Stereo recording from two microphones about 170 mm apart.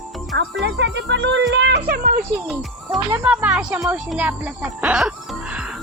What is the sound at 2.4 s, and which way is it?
Speech, 5° right (ahead or behind).